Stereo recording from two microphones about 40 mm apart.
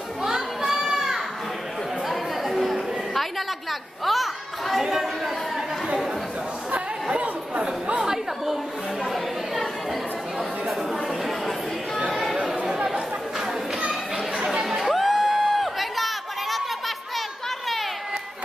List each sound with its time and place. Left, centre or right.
0.2 s children playing: centre
2.0 s chatter: centre
6.7 s chatter: right
8.0 s chatter: centre
9.0 s a sound: centre
10.7 s a sound: centre
12.1 s chatter: centre
14.3 s chatter: right
14.6 s crowd: centre